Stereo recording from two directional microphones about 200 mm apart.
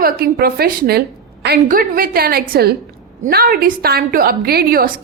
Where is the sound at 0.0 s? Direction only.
50° right (ahead or behind).